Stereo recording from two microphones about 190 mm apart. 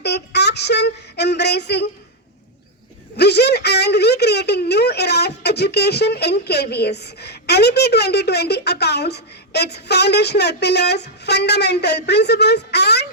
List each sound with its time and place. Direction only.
0.0 s child singing: 60° left (ahead or behind)
3.2 s a woman's voice: 60° left (ahead or behind)